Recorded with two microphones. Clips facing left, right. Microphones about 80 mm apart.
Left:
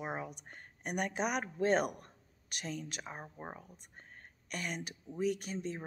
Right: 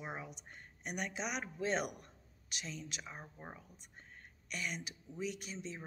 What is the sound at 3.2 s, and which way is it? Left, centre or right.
Speech, left.